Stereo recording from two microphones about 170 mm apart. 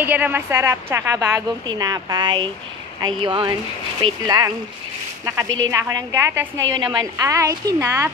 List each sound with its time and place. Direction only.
0.0 s a woman's voice: 10° right (ahead or behind)